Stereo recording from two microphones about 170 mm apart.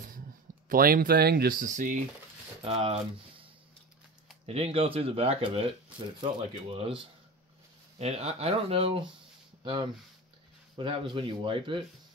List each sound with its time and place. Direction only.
0.7 s speech: 60° right (ahead or behind)
2.6 s speech: 35° right (ahead or behind)
4.5 s speech: 35° right (ahead or behind)
8.0 s speech: 40° right (ahead or behind)
9.6 s a sound: 30° right (ahead or behind)
10.8 s speech: 30° right (ahead or behind)